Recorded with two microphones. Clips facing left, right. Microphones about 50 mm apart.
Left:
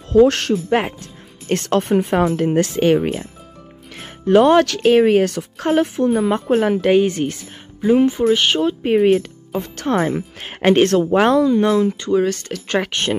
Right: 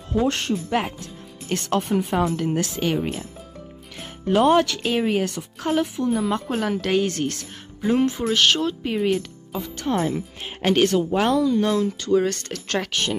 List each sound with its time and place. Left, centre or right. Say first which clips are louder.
0.1 s speech: left 9 dB; left
0.7 s speech: left 6 dB; left
3.0 s speech: left 5 dB; left
3.9 s speech: left 8 dB; left
6.6 s a woman's voice: left 6 dB; left
8.8 s speech: left 8 dB; left
9.8 s speech: left 4 dB; left
10.6 s speech: left 5 dB; left
11.0 s speech: left 6 dB; left
11.7 s speech: left 6 dB; left
12.1 s speech: left 3 dB; centre
12.6 s speech: left 6 dB; centre
12.9 s speech: left 4 dB; left